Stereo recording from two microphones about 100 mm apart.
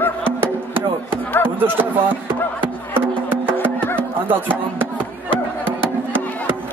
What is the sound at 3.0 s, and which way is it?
Music, 20° right (ahead or behind).